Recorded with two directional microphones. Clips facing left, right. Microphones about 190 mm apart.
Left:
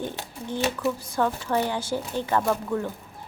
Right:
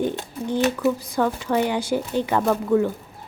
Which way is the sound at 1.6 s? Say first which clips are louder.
Right 5 dB; 15° right (ahead or behind).